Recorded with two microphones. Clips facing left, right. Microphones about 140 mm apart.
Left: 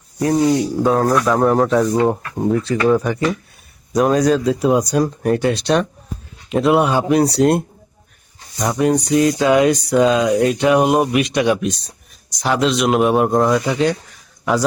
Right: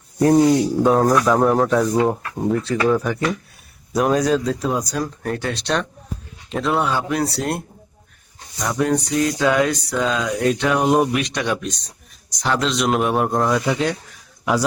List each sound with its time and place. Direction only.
0.4 s speech: centre (ahead or behind)
5.2 s a sound: 15° left (ahead or behind)
12.4 s speech: 5° left (ahead or behind)